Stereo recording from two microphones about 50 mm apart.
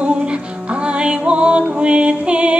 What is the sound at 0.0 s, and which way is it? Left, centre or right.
Music, right.